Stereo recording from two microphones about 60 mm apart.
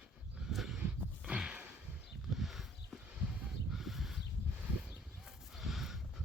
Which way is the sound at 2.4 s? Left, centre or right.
Centre.